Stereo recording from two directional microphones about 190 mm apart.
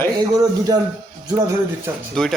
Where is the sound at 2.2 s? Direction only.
5° left (ahead or behind).